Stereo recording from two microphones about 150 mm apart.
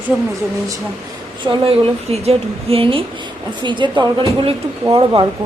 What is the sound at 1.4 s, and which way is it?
Speech, 35° right (ahead or behind).